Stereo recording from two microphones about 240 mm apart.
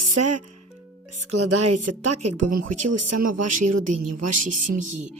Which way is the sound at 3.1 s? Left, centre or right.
Right.